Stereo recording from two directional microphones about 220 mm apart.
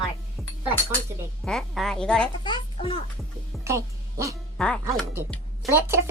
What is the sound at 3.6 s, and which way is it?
Music, 15° right (ahead or behind).